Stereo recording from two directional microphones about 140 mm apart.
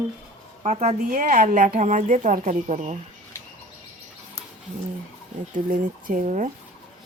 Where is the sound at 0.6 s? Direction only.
50° right (ahead or behind).